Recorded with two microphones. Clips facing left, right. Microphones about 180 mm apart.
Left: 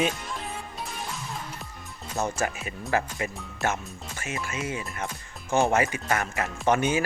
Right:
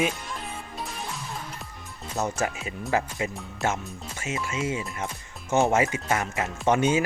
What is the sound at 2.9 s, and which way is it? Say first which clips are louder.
Speech: right 1 dB; 20° right (ahead or behind).